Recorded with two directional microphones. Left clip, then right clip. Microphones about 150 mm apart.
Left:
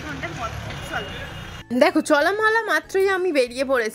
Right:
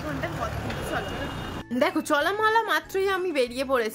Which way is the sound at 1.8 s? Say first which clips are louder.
Left 6 dB; 30° left (ahead or behind).